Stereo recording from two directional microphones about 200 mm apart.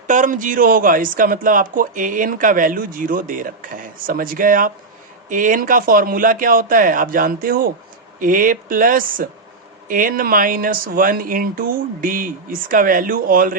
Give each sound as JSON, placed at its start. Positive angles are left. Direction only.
{"t": 0.1, "sound": "speech", "side_deg": -40}